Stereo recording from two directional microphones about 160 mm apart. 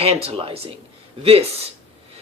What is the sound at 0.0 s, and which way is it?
Speech, 40° right (ahead or behind).